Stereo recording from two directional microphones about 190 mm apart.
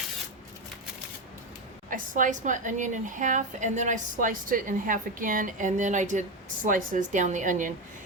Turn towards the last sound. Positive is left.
turn(degrees=-45)  # may be behind; listen again after turning